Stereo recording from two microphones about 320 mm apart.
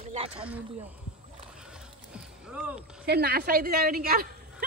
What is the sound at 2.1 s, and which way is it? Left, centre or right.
Music, centre.